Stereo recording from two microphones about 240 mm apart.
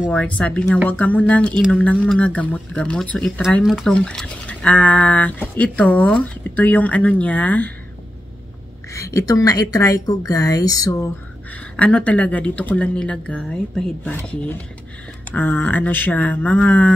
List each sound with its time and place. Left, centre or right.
0.0 s speech: centre
8.9 s speech: centre